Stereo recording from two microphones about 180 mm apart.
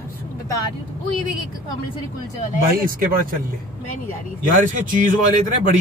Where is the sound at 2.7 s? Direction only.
50° right (ahead or behind).